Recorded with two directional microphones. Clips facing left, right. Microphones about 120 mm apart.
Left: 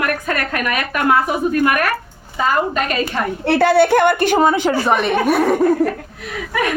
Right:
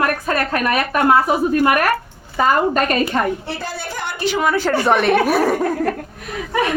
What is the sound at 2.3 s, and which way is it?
Speech, 45° right (ahead or behind).